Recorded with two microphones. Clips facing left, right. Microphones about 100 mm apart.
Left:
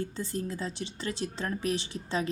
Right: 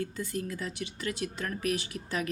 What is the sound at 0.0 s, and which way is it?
A woman's voice, 30° left (ahead or behind).